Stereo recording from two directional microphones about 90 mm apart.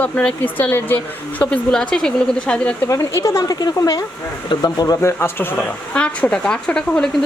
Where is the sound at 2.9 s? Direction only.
35° left (ahead or behind).